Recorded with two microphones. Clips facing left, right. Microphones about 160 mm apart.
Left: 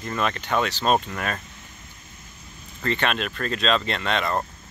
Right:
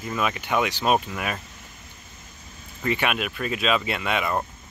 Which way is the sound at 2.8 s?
10° right (ahead or behind).